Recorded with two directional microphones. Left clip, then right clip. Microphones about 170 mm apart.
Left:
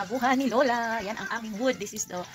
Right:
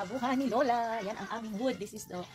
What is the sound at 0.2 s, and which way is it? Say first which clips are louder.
Speech: left 6 dB; 15° left (ahead or behind).